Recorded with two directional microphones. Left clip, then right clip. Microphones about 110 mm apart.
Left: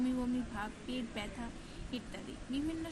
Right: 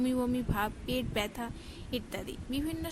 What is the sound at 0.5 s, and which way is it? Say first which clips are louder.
A woman's voice: right 8 dB; 60° right (ahead or behind).